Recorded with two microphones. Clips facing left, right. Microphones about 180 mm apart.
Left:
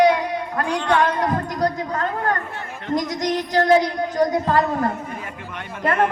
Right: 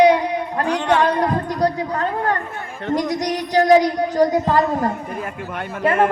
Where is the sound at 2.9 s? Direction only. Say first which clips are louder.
Right 2 dB; 35° right (ahead or behind).